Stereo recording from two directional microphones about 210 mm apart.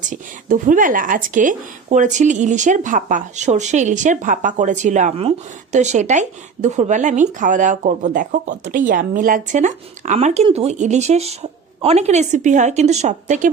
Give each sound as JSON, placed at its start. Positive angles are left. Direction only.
{"t": 0.0, "sound": "speech", "side_deg": -35}